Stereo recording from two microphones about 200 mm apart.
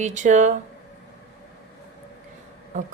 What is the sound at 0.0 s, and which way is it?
Speech, 40° right (ahead or behind).